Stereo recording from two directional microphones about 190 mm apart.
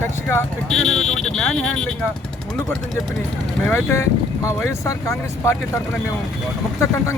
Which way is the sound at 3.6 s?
15° left (ahead or behind).